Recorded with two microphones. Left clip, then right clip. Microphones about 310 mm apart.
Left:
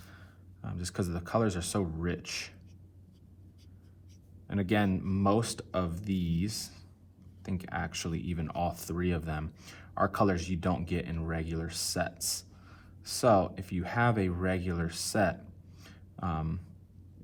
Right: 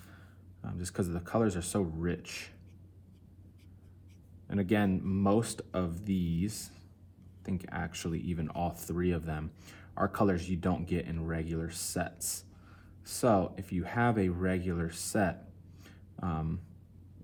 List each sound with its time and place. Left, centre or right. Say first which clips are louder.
0.6 s speech: even; centre
4.4 s speech: left 1 dB; centre
15.8 s a sound: left 2 dB; centre